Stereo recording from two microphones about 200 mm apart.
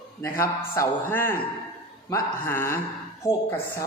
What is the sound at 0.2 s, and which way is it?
A man's voice, 10° left (ahead or behind).